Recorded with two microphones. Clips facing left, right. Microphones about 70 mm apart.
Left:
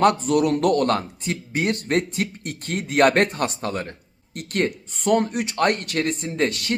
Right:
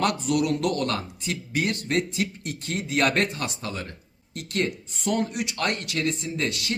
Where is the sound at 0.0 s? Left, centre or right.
Left.